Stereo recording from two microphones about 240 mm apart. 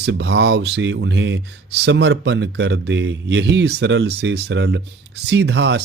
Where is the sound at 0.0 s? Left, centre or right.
Right.